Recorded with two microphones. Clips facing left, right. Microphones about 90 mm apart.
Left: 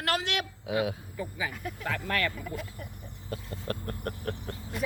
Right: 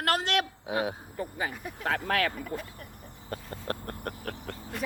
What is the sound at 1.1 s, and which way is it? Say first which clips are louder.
Speech: right 1 dB; 50° right (ahead or behind).